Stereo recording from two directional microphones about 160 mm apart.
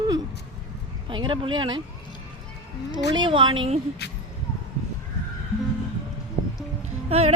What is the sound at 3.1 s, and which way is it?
Speech, 30° right (ahead or behind).